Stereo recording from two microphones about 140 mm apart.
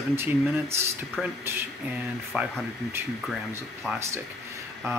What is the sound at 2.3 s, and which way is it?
Speech, 10° right (ahead or behind).